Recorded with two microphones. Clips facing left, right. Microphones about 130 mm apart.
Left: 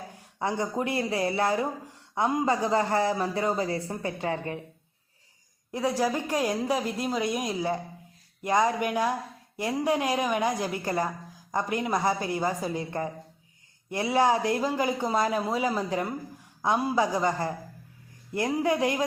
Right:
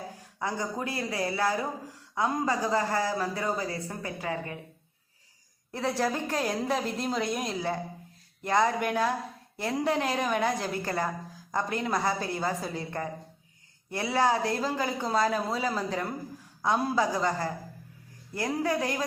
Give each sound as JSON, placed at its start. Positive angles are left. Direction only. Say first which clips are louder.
{"t": 0.3, "sound": "a man's voice", "louder": "left 4 dB", "side_deg": 25}
{"t": 5.7, "sound": "a man's voice", "louder": "left 2 dB", "side_deg": 10}